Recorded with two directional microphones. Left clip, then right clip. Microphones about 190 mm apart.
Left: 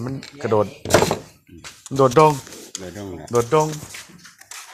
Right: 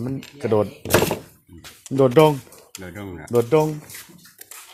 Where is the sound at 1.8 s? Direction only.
25° right (ahead or behind).